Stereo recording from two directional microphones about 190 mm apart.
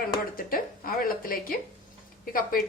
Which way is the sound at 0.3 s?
50° left (ahead or behind).